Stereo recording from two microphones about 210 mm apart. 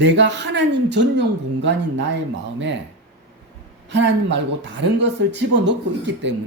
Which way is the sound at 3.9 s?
60° right (ahead or behind).